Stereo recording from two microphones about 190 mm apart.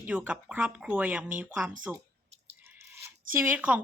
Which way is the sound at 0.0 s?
5° right (ahead or behind).